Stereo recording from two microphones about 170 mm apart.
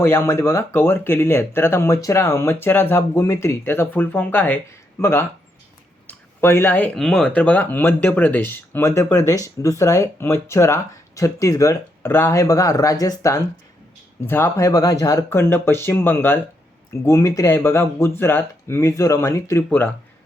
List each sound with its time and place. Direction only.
0.0 s speech: 15° left (ahead or behind)